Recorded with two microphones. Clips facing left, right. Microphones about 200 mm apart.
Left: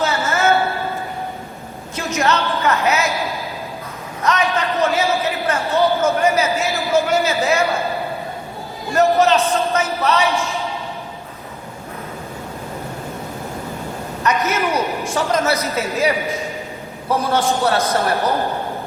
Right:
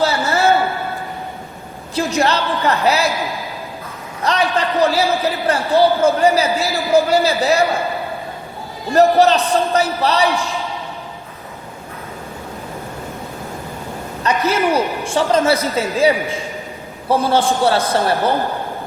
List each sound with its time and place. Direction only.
0.0 s a sound: 35° right (ahead or behind)
2.0 s a man's voice: 30° right (ahead or behind)
4.2 s a man's voice: 35° right (ahead or behind)
8.9 s a man's voice: 35° right (ahead or behind)
14.3 s a man's voice: 30° right (ahead or behind)